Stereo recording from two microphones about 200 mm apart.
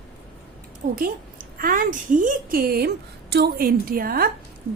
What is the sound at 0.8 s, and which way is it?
A woman's voice, 45° right (ahead or behind).